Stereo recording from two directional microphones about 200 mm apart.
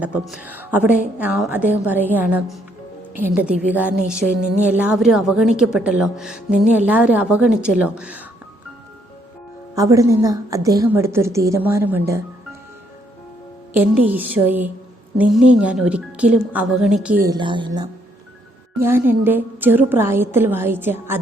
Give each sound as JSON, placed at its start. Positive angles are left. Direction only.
{"t": 0.0, "sound": "a woman's voice", "side_deg": -5}
{"t": 9.7, "sound": "a woman's voice", "side_deg": -15}
{"t": 13.7, "sound": "a woman's voice", "side_deg": -10}
{"t": 17.2, "sound": "a woman's voice", "side_deg": -20}
{"t": 18.8, "sound": "a woman's voice", "side_deg": -10}